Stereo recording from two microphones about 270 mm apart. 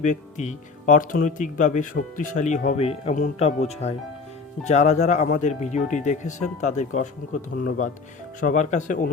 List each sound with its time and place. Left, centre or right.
0.0 s speech: left